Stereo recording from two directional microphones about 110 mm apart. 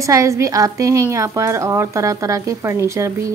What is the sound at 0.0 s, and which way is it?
Speech, 30° right (ahead or behind).